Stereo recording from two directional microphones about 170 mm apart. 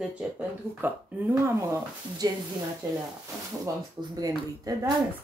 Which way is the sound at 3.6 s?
20° right (ahead or behind).